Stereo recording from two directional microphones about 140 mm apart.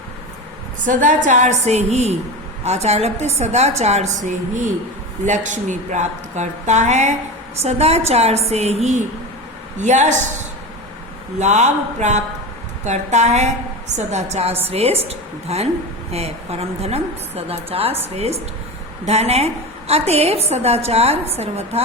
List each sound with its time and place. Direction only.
0.9 s a woman's voice: 65° right (ahead or behind)
11.3 s a woman's voice: 55° right (ahead or behind)
19.0 s a woman's voice: 50° right (ahead or behind)